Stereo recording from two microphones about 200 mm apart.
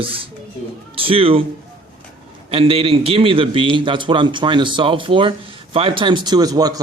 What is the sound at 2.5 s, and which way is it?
A man's voice, 30° right (ahead or behind).